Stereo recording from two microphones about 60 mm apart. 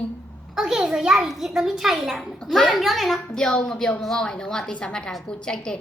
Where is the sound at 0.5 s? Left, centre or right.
Centre.